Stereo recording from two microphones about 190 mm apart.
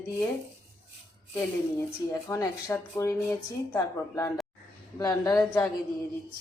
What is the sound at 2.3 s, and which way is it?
Speech, 15° left (ahead or behind).